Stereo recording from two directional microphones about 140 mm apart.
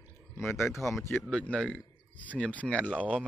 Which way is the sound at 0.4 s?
15° left (ahead or behind).